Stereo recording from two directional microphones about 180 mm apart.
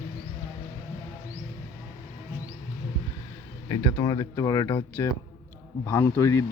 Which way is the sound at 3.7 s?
20° left (ahead or behind).